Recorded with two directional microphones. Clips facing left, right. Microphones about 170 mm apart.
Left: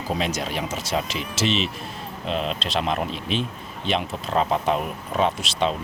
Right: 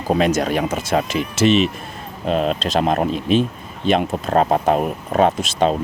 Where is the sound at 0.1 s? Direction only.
50° right (ahead or behind).